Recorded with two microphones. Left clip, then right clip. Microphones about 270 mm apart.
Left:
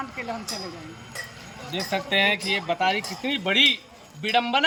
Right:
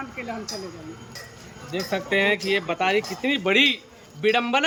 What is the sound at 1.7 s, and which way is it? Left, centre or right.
Speech, centre.